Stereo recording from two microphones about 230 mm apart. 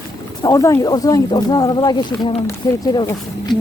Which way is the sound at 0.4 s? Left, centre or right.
Centre.